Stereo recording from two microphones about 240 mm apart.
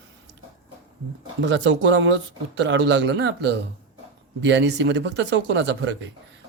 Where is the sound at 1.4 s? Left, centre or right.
Right.